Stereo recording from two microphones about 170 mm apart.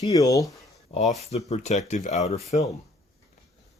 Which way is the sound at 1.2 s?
40° left (ahead or behind).